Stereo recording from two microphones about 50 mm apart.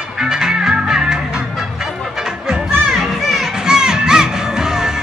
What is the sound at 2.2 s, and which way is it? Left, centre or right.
Music, centre.